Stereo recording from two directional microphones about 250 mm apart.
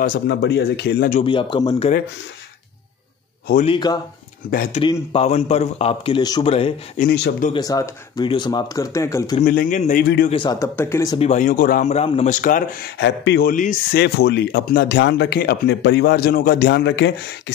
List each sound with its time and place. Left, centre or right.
0.0 s speech: left
1.2 s a man's voice: centre
3.6 s speech: centre
4.5 s speech: left
4.8 s a man's voice: left
7.1 s speech: left
7.5 s speech: centre
9.4 s speech: left
10.3 s speech: centre
11.1 s speech: left